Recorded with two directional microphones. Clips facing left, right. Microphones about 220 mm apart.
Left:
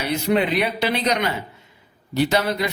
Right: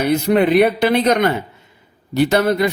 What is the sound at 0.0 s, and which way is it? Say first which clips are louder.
Speech: right 6 dB; 50° right (ahead or behind).